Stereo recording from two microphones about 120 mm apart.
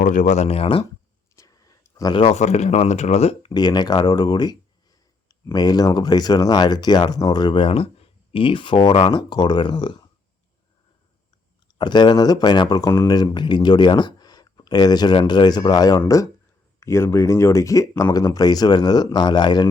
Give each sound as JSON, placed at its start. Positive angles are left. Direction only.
{"t": 0.0, "sound": "speech", "side_deg": 90}
{"t": 1.4, "sound": "a sound", "side_deg": 30}
{"t": 2.3, "sound": "speech", "side_deg": 70}
{"t": 3.5, "sound": "speech", "side_deg": 35}
{"t": 11.8, "sound": "speech", "side_deg": 40}